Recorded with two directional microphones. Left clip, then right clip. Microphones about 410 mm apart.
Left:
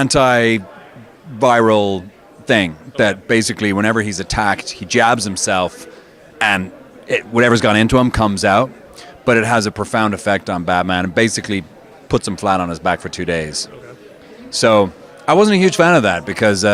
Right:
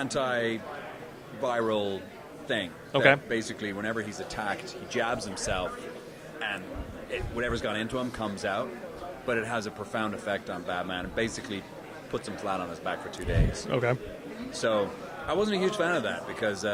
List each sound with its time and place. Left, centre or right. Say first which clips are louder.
0.0 s speech: left 16 dB; left
7.1 s speech: left 18 dB; left
14.5 s speech: left 15 dB; left